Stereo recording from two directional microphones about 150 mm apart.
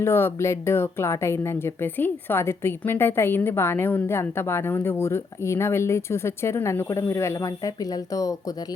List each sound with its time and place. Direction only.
0.0 s a woman's voice: 15° left (ahead or behind)